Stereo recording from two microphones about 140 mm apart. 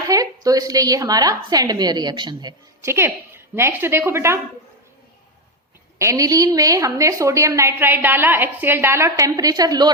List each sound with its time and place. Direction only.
0.1 s a woman's voice: 25° right (ahead or behind)
2.8 s a woman's voice: 20° right (ahead or behind)
6.0 s a woman's voice: 25° right (ahead or behind)